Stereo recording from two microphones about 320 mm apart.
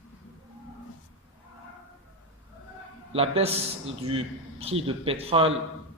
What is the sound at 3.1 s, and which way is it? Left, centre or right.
A man's voice, centre.